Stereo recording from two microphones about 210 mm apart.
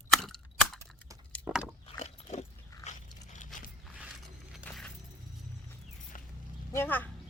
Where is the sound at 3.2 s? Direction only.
35° left (ahead or behind).